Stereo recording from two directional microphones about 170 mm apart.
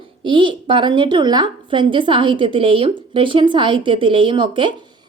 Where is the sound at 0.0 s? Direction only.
30° right (ahead or behind).